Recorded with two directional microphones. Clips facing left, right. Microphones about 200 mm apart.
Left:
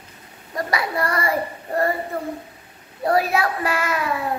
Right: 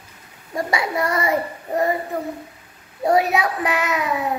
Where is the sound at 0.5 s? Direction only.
25° right (ahead or behind).